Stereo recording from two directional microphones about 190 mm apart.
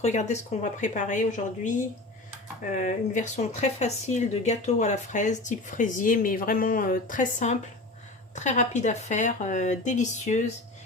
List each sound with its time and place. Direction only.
0.0 s speech: 35° left (ahead or behind)